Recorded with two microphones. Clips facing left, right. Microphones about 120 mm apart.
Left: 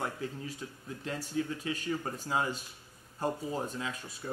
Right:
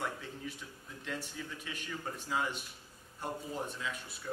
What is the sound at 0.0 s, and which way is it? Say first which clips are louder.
Speech: left 3 dB; 35° left (ahead or behind).